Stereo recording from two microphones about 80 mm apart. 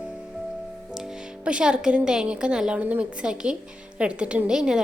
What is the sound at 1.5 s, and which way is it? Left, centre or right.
A woman's voice, centre.